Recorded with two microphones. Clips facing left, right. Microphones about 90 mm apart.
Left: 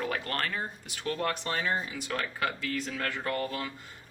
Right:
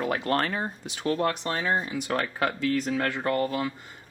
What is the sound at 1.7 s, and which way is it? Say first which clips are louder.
Speech: right 5 dB; 30° right (ahead or behind).